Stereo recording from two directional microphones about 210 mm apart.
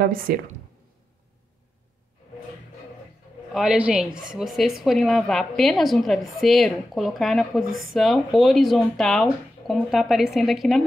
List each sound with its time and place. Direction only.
0.0 s speech: 45° right (ahead or behind)
3.5 s a woman's voice: 5° right (ahead or behind)